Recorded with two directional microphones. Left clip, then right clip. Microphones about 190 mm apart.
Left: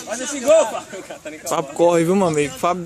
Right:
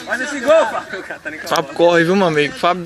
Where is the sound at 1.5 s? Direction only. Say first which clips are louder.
Right 3 dB; 15° left (ahead or behind).